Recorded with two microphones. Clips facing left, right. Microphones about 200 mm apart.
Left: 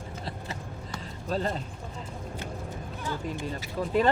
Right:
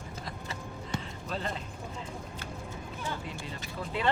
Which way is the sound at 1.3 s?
40° left (ahead or behind).